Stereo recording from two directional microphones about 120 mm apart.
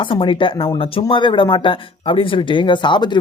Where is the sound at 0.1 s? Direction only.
45° left (ahead or behind).